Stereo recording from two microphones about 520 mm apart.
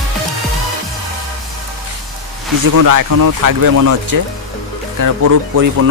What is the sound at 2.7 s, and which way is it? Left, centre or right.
Speech, right.